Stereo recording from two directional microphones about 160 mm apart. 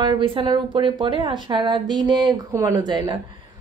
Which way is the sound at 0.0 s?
30° right (ahead or behind).